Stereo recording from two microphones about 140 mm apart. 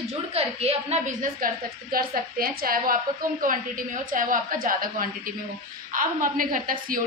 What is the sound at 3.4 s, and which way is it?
A woman's voice, 75° right (ahead or behind).